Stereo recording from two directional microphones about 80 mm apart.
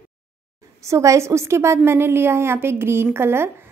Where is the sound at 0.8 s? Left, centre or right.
Right.